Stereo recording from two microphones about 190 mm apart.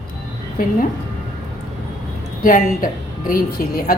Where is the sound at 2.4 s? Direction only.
45° left (ahead or behind).